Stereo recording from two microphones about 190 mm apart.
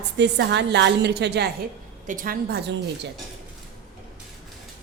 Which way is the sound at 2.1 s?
45° right (ahead or behind).